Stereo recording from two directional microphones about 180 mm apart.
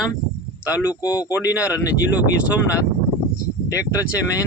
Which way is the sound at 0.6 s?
20° left (ahead or behind).